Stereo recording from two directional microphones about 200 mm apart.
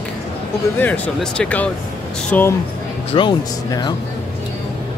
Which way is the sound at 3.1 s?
20° left (ahead or behind).